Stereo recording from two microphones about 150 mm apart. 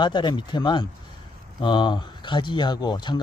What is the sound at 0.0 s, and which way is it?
Speech, 30° left (ahead or behind).